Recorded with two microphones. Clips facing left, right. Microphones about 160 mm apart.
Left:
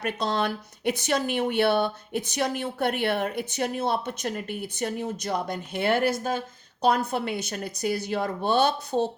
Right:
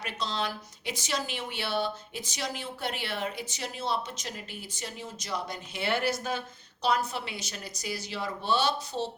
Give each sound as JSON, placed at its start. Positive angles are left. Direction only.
{"t": 0.0, "sound": "a woman's voice", "side_deg": 55}